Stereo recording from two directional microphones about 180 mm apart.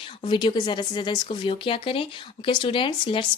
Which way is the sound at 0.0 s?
30° left (ahead or behind).